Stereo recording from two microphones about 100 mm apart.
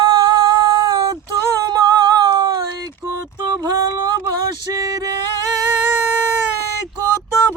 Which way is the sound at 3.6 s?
45° right (ahead or behind).